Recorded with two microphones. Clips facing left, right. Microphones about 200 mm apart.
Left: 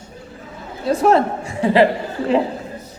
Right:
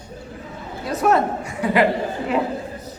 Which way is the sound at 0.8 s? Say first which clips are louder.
Left 4 dB; 30° left (ahead or behind).